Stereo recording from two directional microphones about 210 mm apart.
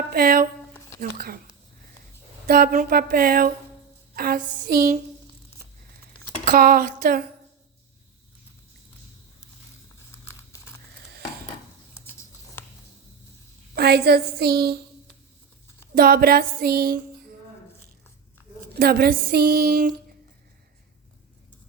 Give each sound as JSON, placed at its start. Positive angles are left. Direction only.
{"t": 0.1, "sound": "speech", "side_deg": -45}
{"t": 2.5, "sound": "speech", "side_deg": -45}
{"t": 6.4, "sound": "speech", "side_deg": -45}
{"t": 10.2, "sound": "a sound", "side_deg": 10}
{"t": 13.7, "sound": "speech", "side_deg": -50}
{"t": 16.0, "sound": "speech", "side_deg": -45}
{"t": 18.8, "sound": "speech", "side_deg": -50}